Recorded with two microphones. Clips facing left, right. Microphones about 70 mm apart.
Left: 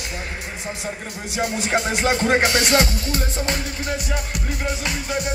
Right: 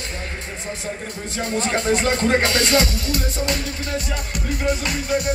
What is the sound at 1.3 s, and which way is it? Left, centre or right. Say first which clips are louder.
Music: left 1 dB; centre.